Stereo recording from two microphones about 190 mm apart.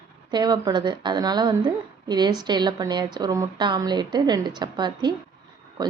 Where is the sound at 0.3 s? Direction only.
20° right (ahead or behind).